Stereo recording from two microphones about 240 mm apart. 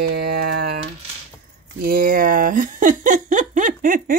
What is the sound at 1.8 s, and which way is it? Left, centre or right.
Speech, right.